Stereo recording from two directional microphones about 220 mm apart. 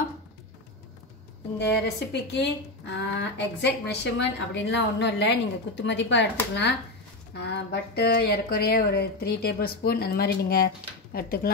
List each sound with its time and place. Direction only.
2.3 s a woman's voice: 50° left (ahead or behind)